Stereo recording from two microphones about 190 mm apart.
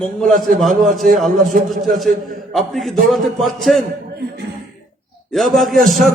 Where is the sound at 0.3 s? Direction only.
45° right (ahead or behind).